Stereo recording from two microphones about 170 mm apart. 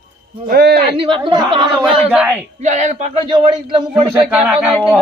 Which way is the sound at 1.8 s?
5° right (ahead or behind).